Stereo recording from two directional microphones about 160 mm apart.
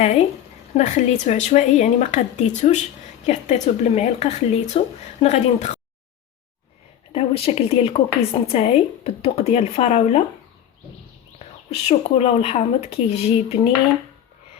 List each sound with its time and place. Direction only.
0.0 s a woman's voice: 45° left (ahead or behind)
7.1 s a woman's voice: 35° left (ahead or behind)
11.3 s a woman's voice: 40° left (ahead or behind)